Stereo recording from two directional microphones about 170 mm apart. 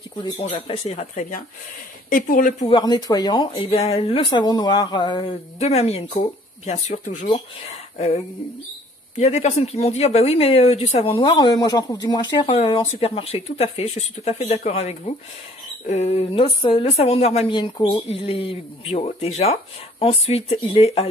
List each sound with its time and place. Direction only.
0.2 s speech: 35° left (ahead or behind)
2.0 s speech: 55° left (ahead or behind)
2.6 s speech: 25° left (ahead or behind); by 7.4 s 45° left (ahead or behind)
9.1 s speech: 40° left (ahead or behind)